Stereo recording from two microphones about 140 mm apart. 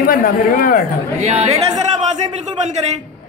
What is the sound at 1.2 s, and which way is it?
Speech, 50° right (ahead or behind).